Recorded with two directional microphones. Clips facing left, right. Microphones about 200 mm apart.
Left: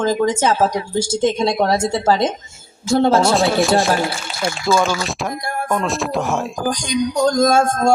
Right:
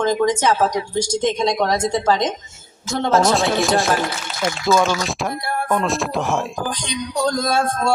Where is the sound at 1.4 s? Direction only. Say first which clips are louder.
Left 2 dB; 30° left (ahead or behind).